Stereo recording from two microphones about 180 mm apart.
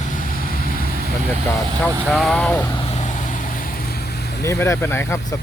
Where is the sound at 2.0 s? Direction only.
Centre (ahead or behind).